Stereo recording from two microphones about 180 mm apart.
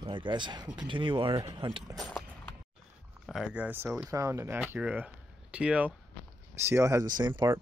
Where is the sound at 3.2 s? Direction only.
5° right (ahead or behind).